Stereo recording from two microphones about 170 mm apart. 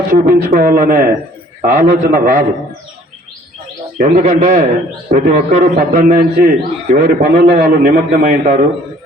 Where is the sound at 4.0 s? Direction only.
50° right (ahead or behind).